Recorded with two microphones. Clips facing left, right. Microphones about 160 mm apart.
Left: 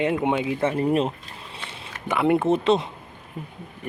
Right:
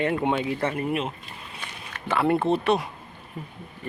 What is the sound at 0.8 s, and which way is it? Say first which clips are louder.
Speech: left 6 dB; 35° left (ahead or behind).